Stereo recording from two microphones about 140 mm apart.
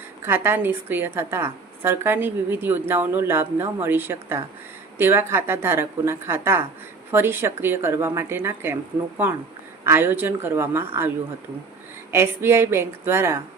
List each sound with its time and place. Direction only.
0.3 s a woman's voice: 15° right (ahead or behind)
12.1 s a woman's voice: 20° right (ahead or behind)